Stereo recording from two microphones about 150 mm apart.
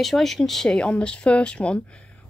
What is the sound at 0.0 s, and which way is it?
Speech, centre (ahead or behind).